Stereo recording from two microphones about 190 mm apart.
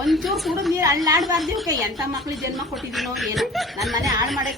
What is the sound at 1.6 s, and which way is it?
Speech, 20° right (ahead or behind).